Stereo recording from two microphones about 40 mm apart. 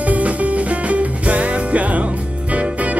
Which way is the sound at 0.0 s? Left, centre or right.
Right.